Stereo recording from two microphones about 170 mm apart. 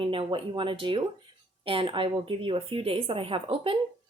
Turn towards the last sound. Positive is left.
turn(degrees=-35)  # may be behind; listen again after turning